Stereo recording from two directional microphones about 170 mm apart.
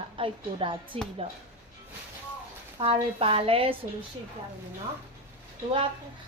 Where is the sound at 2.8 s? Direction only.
35° right (ahead or behind).